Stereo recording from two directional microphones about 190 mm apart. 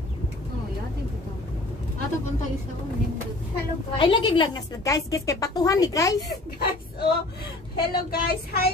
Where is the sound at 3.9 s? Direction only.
25° left (ahead or behind).